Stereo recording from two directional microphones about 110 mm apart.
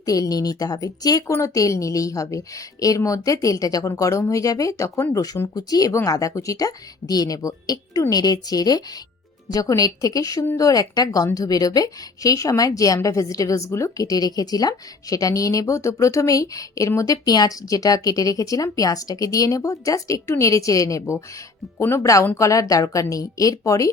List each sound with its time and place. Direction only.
0.0 s a woman's voice: 35° left (ahead or behind)